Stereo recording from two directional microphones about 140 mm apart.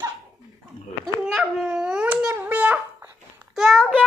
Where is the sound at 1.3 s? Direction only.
Centre (ahead or behind).